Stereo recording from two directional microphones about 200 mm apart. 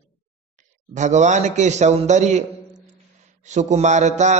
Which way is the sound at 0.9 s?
35° right (ahead or behind).